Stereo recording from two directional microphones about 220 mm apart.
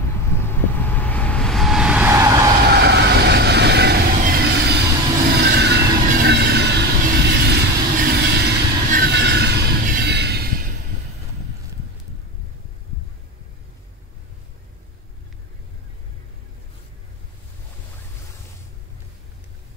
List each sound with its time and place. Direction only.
0.4 s vehicle: 10° left (ahead or behind); by 2.3 s 10° right (ahead or behind)
2.7 s vehicle: 50° right (ahead or behind)
4.2 s a sound: 45° right (ahead or behind)
5.4 s train: 50° right (ahead or behind)